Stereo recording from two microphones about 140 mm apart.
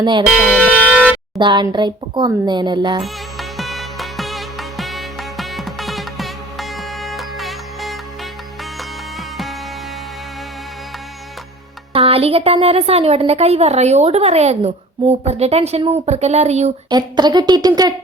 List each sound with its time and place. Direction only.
0.0 s a woman's voice: 35° right (ahead or behind)
0.3 s speech: 5° right (ahead or behind)
1.4 s a child's voice: 35° right (ahead or behind)
3.0 s music: centre (ahead or behind)
11.9 s a woman's voice: 45° right (ahead or behind)
16.9 s a woman's voice: 30° right (ahead or behind)